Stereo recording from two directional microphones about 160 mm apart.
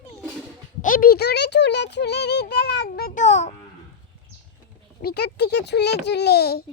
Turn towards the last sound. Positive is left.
turn(degrees=80)